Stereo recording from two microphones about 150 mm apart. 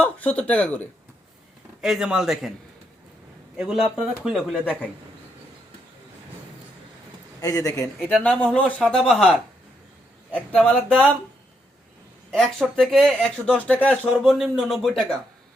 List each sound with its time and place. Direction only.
0.0 s speech: 10° left (ahead or behind)
1.8 s speech: 5° right (ahead or behind)
3.6 s speech: 5° right (ahead or behind)
4.6 s speech: 10° left (ahead or behind)
7.4 s speech: 25° left (ahead or behind)
8.0 s speech: 10° left (ahead or behind)
12.3 s speech: 5° left (ahead or behind)